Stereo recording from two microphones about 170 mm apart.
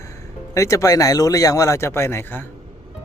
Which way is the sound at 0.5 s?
20° left (ahead or behind).